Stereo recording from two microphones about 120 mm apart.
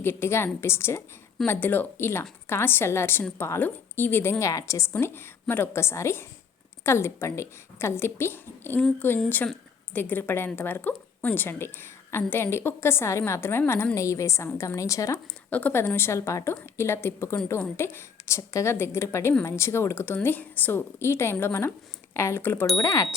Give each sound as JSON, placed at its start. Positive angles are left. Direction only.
{"t": 0.0, "sound": "a woman's voice", "side_deg": 20}
{"t": 15.4, "sound": "a woman's voice", "side_deg": 15}